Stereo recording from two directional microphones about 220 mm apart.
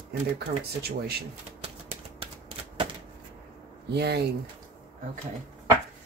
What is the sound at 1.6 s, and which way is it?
Typewriter, 25° right (ahead or behind).